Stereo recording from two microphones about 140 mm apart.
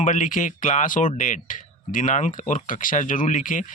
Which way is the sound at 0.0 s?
65° left (ahead or behind).